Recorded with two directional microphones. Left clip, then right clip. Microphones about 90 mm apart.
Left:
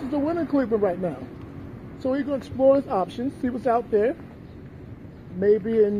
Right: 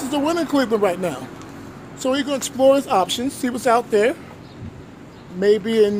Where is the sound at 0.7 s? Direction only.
50° right (ahead or behind).